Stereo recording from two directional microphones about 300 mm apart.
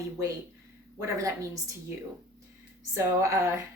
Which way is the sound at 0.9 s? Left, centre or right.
Centre.